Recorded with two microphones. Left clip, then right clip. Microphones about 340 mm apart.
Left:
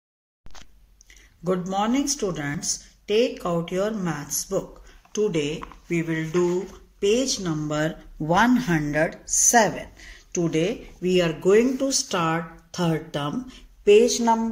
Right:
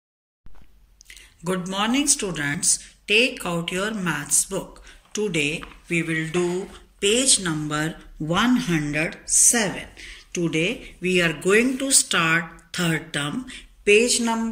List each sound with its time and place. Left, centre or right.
1.0 s speech: centre